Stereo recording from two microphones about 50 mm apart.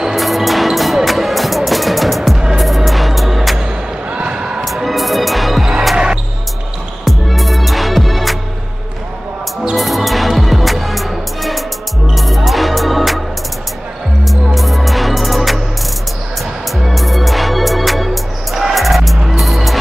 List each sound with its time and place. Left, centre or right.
0.0 s music: centre
2.3 s music: centre
2.6 s music: centre
4.1 s basketball bounce: right
4.8 s music: centre
7.1 s music: centre
9.8 s music: centre
14.2 s music: centre
16.7 s music: centre